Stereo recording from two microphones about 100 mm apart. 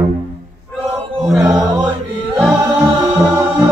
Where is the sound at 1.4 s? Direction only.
15° right (ahead or behind).